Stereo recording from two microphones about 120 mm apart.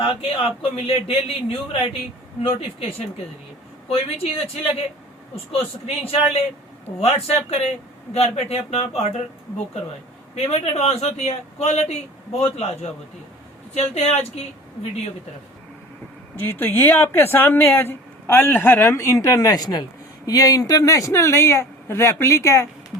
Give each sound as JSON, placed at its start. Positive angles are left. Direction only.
{"t": 0.0, "sound": "speech", "side_deg": 50}
{"t": 2.4, "sound": "a man's voice", "side_deg": 50}
{"t": 10.3, "sound": "a man's voice", "side_deg": 55}
{"t": 13.9, "sound": "a man's voice", "side_deg": 60}
{"t": 16.4, "sound": "speech", "side_deg": 20}